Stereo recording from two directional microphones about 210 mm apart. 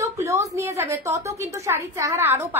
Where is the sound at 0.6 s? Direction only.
15° right (ahead or behind).